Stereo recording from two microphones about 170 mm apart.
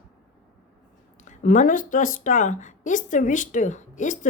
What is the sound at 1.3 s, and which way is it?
A woman's voice, 45° left (ahead or behind).